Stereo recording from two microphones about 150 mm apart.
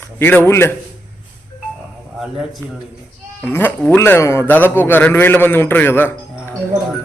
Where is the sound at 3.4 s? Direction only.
15° left (ahead or behind).